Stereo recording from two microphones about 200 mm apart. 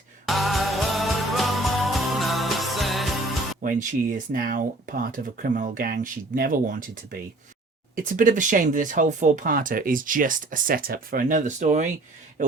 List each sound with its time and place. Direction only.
0.3 s music: centre (ahead or behind)
3.6 s speech: 40° right (ahead or behind)